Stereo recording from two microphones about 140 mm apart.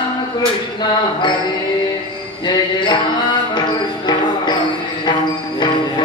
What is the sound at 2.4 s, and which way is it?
Music, 35° left (ahead or behind).